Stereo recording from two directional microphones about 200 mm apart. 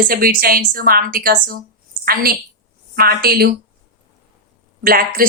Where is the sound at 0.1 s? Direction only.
45° right (ahead or behind).